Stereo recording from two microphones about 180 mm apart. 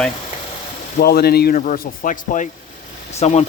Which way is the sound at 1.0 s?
60° left (ahead or behind).